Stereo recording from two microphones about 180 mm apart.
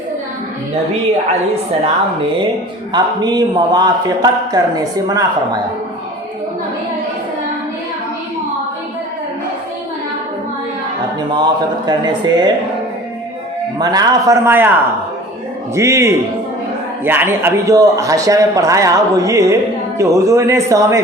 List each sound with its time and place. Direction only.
2.9 s a man's voice: 25° right (ahead or behind)
11.2 s a man's voice: 25° right (ahead or behind)
13.7 s a man's voice: 20° right (ahead or behind)
15.7 s a man's voice: 15° right (ahead or behind)